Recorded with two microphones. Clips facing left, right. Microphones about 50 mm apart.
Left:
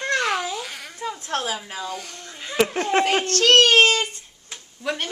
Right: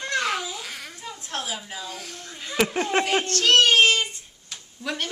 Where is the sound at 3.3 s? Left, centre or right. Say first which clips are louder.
Left 3 dB; left.